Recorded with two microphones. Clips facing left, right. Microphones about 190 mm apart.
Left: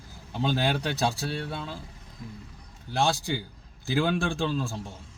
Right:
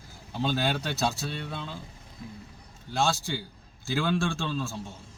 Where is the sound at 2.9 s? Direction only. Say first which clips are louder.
Left 1 dB; 15° left (ahead or behind).